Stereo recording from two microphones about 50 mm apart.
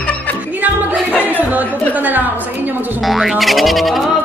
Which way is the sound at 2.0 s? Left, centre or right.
Right.